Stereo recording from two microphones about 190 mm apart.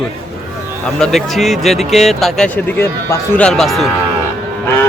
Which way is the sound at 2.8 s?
15° left (ahead or behind).